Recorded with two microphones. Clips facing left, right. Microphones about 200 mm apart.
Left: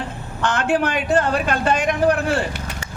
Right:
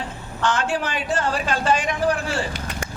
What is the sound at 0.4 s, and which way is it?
Speech, 60° left (ahead or behind).